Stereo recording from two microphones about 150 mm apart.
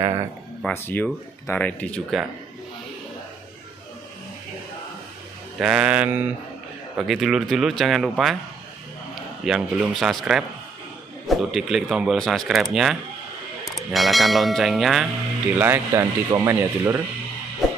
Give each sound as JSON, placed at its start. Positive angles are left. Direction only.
{"t": 0.8, "sound": "speech", "side_deg": 10}
{"t": 5.6, "sound": "speech", "side_deg": -5}
{"t": 9.4, "sound": "speech", "side_deg": 0}
{"t": 15.5, "sound": "speech", "side_deg": -15}